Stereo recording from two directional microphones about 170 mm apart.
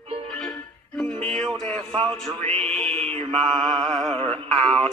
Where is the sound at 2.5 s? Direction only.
35° right (ahead or behind).